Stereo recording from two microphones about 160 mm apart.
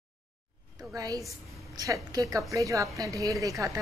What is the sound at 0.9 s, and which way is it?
A woman's voice, 20° right (ahead or behind).